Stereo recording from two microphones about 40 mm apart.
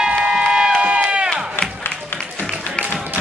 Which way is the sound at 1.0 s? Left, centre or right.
Centre.